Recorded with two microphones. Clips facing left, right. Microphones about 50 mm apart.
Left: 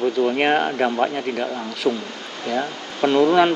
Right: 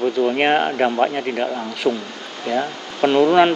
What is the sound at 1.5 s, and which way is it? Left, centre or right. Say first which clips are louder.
A man's voice: right 1 dB; centre.